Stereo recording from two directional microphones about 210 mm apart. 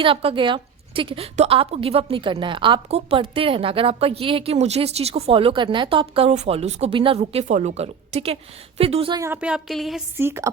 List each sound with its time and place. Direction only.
0.0 s a woman's voice: 25° right (ahead or behind); by 10.0 s centre (ahead or behind)
10.2 s a woman's voice: 10° right (ahead or behind)